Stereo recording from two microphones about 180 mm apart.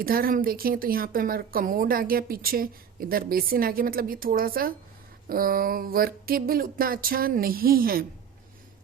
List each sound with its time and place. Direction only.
0.0 s speech: 55° right (ahead or behind)